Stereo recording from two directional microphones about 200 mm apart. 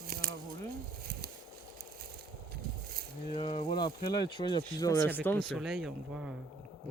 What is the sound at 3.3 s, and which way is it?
Speech, 30° left (ahead or behind).